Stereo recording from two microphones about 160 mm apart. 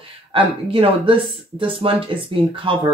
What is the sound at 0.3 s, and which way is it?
Speech, 35° right (ahead or behind).